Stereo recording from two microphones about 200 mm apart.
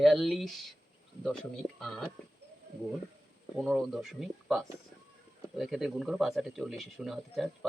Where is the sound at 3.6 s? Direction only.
Centre (ahead or behind).